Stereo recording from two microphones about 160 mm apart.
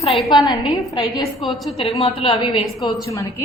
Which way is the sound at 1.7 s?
35° left (ahead or behind).